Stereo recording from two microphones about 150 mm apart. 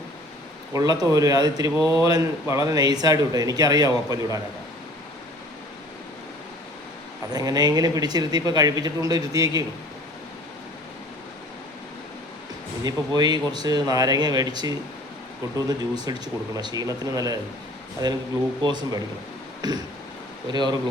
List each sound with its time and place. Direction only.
0.7 s speech: 25° right (ahead or behind)
7.3 s speech: 25° right (ahead or behind)
12.8 s speech: 25° right (ahead or behind)
16.0 s speech: 30° right (ahead or behind)